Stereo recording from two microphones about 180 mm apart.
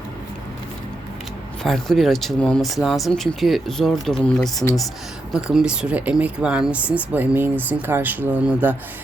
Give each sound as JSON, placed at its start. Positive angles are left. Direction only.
{"t": 1.6, "sound": "speech", "side_deg": 0}